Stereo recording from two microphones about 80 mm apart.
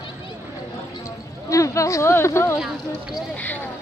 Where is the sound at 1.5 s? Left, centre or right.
Left.